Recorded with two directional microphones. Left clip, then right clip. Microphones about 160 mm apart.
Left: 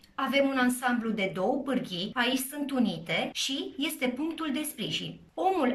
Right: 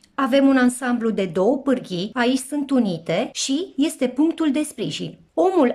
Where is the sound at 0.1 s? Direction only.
65° right (ahead or behind).